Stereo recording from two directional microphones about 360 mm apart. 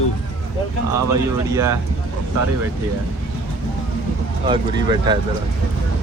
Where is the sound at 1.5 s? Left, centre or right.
Centre.